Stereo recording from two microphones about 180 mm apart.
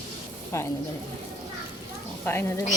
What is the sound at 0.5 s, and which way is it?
Speech, 15° left (ahead or behind).